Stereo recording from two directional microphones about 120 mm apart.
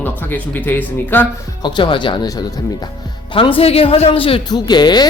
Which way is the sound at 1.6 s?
45° left (ahead or behind).